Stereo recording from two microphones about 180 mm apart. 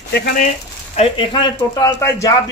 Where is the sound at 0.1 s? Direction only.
55° left (ahead or behind).